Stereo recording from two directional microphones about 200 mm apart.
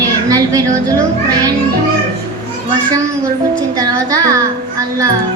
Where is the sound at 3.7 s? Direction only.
15° right (ahead or behind).